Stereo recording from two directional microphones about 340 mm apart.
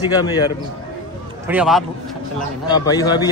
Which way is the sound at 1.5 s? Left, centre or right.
Centre.